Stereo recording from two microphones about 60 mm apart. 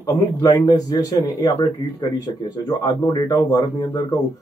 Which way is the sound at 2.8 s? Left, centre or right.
Left.